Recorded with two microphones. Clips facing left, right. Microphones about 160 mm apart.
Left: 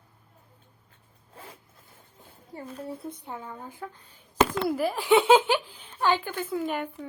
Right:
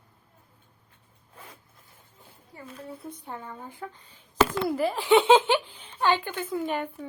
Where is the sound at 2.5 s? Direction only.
35° left (ahead or behind).